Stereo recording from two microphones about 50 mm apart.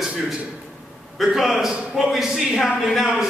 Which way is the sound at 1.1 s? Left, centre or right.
Centre.